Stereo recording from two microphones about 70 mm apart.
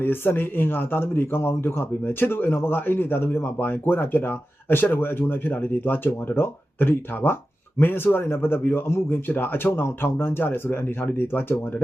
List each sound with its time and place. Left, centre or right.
0.0 s speech: left